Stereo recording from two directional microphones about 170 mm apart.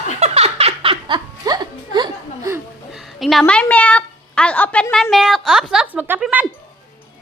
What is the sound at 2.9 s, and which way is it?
A woman's voice, centre (ahead or behind).